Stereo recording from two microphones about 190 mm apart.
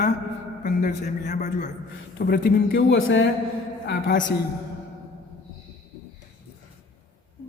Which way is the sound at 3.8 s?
70° left (ahead or behind).